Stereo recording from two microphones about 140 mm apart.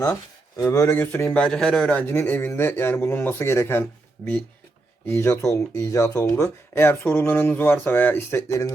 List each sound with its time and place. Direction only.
0.0 s speech: 25° left (ahead or behind)